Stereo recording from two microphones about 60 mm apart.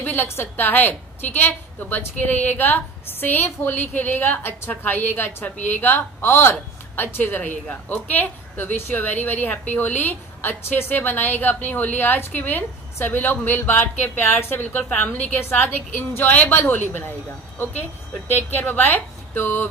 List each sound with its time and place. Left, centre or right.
0.0 s a woman's voice: left
18.5 s a woman's voice: left